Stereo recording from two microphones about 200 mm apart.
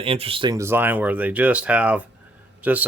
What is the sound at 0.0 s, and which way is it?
Speech, 25° right (ahead or behind).